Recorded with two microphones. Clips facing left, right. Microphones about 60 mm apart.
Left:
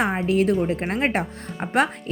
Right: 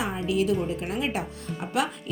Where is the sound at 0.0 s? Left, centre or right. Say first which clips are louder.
Left 5 dB; left.